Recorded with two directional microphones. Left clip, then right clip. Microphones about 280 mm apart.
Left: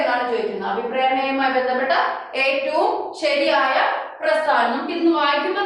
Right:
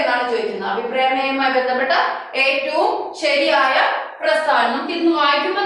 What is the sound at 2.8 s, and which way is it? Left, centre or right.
Speech, left.